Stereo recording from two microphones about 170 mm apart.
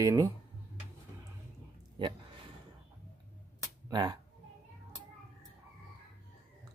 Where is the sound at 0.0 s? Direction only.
20° right (ahead or behind).